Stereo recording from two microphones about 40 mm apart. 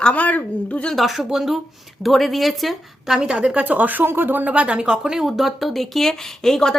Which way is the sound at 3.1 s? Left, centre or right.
Right.